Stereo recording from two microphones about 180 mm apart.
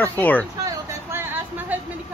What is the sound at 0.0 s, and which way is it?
Speech, 10° left (ahead or behind).